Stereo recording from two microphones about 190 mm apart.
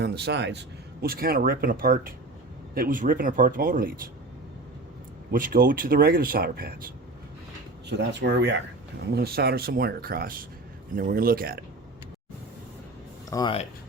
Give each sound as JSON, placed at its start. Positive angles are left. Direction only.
{"t": 0.0, "sound": "speech", "side_deg": -60}
{"t": 1.0, "sound": "speech", "side_deg": -50}
{"t": 5.3, "sound": "speech", "side_deg": -45}
{"t": 7.9, "sound": "speech", "side_deg": -65}
{"t": 13.3, "sound": "speech", "side_deg": 25}